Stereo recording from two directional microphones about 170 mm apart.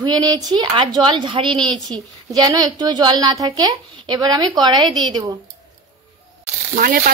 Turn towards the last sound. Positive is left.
turn(degrees=-55)  # may be behind; listen again after turning